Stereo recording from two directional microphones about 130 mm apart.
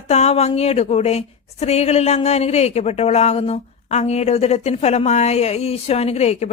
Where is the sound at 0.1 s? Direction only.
55° left (ahead or behind).